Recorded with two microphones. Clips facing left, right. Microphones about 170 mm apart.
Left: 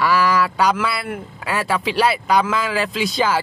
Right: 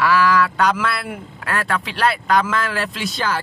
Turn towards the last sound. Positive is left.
turn(degrees=5)  # may be behind; listen again after turning